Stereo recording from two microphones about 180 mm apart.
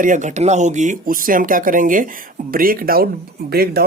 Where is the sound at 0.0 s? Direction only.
45° right (ahead or behind).